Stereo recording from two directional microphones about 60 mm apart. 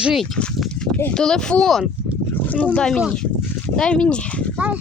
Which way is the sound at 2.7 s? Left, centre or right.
Centre.